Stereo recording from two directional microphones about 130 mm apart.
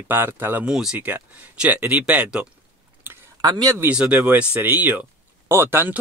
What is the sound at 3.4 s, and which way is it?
Speech, 30° right (ahead or behind).